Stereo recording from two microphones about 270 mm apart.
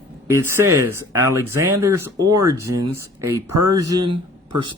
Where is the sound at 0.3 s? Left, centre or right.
Centre.